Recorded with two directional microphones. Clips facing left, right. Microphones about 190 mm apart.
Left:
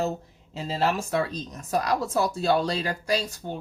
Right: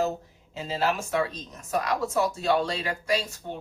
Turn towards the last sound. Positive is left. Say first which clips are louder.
# left 1 dB
turn(degrees=35)  # may be behind; listen again after turning